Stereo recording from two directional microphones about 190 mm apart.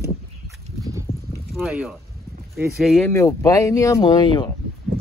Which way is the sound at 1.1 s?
35° left (ahead or behind).